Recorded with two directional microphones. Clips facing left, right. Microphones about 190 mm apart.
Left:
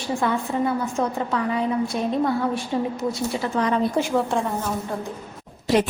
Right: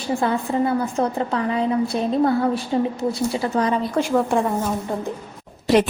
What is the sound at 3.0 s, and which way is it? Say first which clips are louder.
Speech: right 3 dB; 35° right (ahead or behind).